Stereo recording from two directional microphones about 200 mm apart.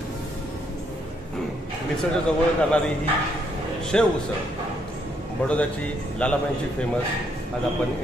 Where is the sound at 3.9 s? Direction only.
5° left (ahead or behind).